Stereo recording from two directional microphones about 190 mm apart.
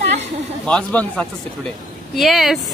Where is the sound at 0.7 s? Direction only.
5° left (ahead or behind).